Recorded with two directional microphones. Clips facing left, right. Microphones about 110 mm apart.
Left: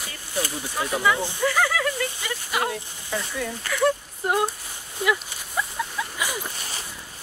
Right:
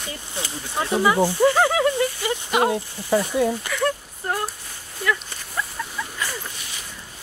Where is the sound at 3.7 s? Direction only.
5° left (ahead or behind).